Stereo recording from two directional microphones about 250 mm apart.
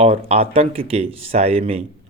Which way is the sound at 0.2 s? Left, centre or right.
Right.